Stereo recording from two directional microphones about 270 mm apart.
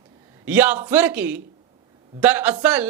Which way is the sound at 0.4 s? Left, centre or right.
Centre.